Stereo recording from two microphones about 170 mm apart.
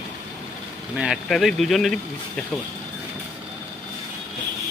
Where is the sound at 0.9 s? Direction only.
5° right (ahead or behind).